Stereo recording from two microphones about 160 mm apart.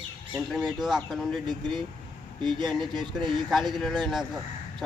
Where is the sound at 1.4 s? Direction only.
30° right (ahead or behind).